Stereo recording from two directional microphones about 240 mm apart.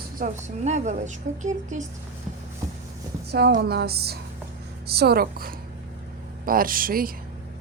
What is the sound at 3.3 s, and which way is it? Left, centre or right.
Speech, right.